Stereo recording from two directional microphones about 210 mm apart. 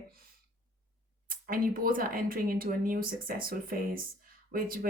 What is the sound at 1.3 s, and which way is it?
Speech, 40° right (ahead or behind).